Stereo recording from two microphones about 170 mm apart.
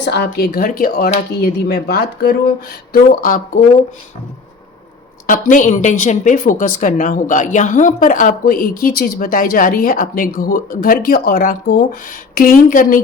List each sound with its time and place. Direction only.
0.0 s speech: 75° left (ahead or behind)
0.3 s a woman's voice: 60° left (ahead or behind)
5.2 s a woman's voice: 50° left (ahead or behind)